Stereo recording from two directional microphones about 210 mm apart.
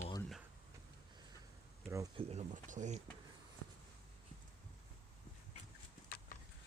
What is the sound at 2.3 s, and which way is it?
Speech, 35° right (ahead or behind).